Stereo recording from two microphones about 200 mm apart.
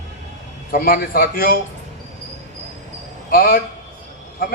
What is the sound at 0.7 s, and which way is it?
Speech, 45° left (ahead or behind).